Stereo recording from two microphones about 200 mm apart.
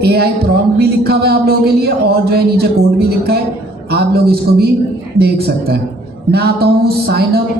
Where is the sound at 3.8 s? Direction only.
50° right (ahead or behind).